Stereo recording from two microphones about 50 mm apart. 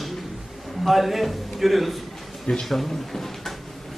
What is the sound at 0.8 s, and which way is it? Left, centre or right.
A man's voice, centre.